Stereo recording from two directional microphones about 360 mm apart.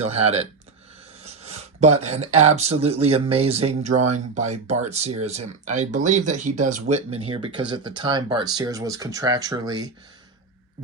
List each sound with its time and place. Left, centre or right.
0.0 s speech: centre
1.2 s a sound: centre
2.0 s speech: centre